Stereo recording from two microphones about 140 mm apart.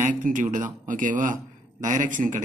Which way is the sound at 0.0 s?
65° right (ahead or behind).